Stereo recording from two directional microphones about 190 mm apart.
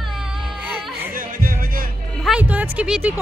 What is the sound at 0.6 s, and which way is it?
Music, 10° right (ahead or behind).